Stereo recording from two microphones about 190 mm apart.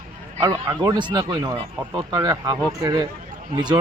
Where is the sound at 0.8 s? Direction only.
20° right (ahead or behind).